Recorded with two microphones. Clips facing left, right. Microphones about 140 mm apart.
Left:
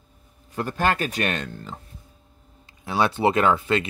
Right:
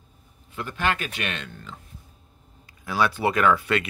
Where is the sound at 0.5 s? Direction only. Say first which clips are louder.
Left 4 dB; 40° left (ahead or behind).